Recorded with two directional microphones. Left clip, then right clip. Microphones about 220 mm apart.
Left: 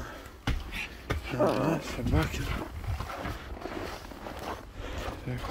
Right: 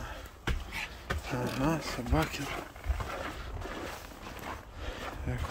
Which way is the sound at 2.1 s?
25° right (ahead or behind).